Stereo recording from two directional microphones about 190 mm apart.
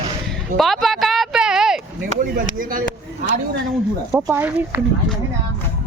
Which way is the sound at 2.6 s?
45° right (ahead or behind).